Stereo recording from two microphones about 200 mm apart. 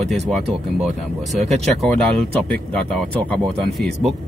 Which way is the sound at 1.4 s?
35° right (ahead or behind).